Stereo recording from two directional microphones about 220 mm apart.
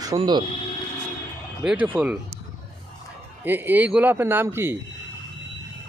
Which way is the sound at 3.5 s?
10° right (ahead or behind).